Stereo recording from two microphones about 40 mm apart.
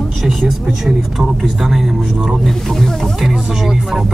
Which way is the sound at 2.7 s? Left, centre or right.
Centre.